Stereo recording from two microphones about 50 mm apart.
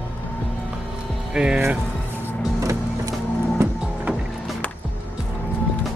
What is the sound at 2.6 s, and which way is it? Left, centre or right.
Music, right.